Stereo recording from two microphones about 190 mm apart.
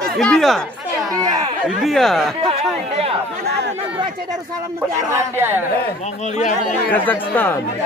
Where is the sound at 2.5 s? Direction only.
30° right (ahead or behind).